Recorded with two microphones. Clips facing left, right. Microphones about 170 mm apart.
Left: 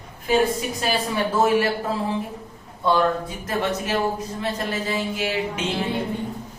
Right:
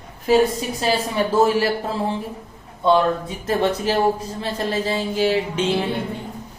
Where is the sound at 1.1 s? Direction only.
30° right (ahead or behind).